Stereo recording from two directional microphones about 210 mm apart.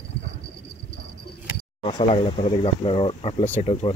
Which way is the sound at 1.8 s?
25° left (ahead or behind).